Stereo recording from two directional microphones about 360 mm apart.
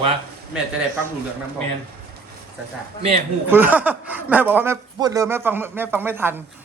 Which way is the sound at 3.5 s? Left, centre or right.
Centre.